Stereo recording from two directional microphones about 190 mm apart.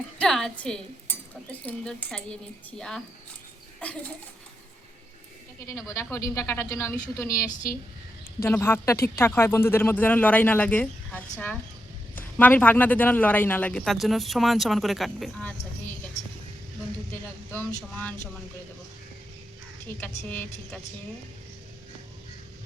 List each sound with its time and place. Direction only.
0.2 s speech: 5° left (ahead or behind)
5.5 s a man's voice: 15° left (ahead or behind)
8.4 s a man's voice: 15° left (ahead or behind)
17.5 s a man's voice: 10° left (ahead or behind)
20.0 s a man's voice: 10° left (ahead or behind)